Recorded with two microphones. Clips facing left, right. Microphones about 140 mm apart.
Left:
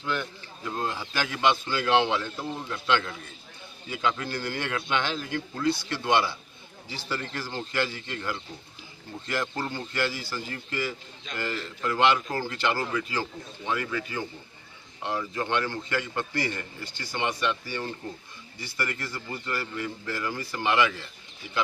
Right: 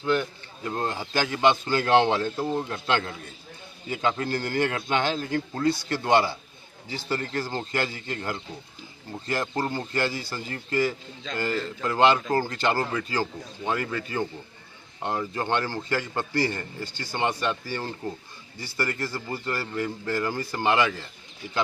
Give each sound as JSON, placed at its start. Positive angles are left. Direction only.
{"t": 0.0, "sound": "speech", "side_deg": -45}
{"t": 1.3, "sound": "a man's voice", "side_deg": -30}
{"t": 2.0, "sound": "a man's voice", "side_deg": -45}